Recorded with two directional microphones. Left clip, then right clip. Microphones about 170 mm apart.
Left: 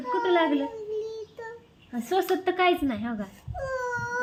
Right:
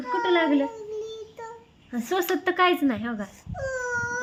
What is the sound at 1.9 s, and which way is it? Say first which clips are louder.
A woman's voice: even; 50° right (ahead or behind).